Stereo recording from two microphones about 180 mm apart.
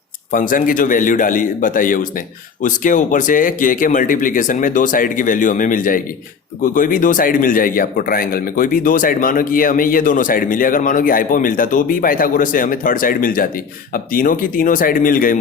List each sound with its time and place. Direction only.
0.3 s speech: 50° left (ahead or behind)